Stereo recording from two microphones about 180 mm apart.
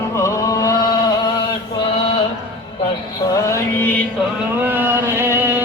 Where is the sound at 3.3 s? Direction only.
15° left (ahead or behind).